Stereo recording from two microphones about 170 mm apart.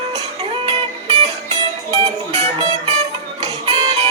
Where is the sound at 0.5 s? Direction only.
35° right (ahead or behind).